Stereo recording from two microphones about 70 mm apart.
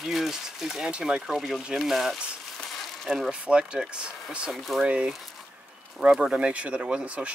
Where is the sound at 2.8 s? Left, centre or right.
Centre.